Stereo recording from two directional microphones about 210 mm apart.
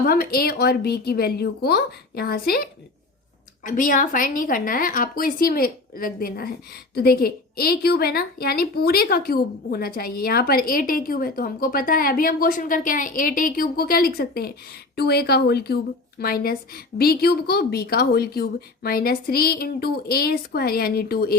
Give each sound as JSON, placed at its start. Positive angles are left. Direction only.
{"t": 0.0, "sound": "a woman's voice", "side_deg": 45}